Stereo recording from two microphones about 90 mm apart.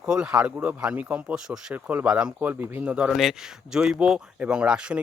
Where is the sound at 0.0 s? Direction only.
10° right (ahead or behind).